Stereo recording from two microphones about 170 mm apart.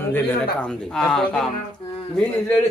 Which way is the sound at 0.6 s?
5° left (ahead or behind).